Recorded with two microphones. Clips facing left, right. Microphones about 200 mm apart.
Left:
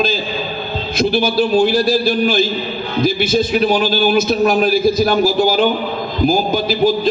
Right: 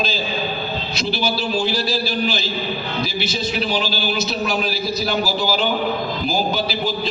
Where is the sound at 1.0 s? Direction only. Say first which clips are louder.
Left 9 dB; 50° left (ahead or behind).